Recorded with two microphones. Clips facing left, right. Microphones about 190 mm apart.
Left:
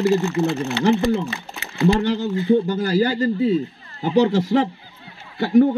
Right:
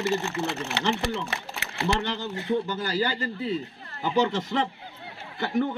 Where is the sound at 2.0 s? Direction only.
35° left (ahead or behind).